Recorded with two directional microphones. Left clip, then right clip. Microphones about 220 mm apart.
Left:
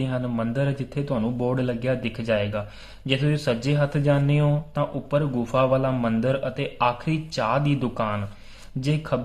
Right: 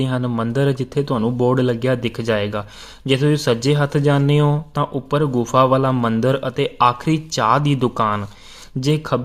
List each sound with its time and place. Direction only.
0.0 s speech: 35° right (ahead or behind)